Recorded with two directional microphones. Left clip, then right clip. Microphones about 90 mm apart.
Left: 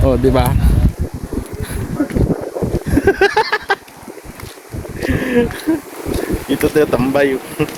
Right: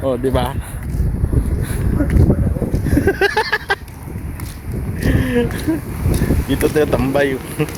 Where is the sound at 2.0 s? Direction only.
40° left (ahead or behind).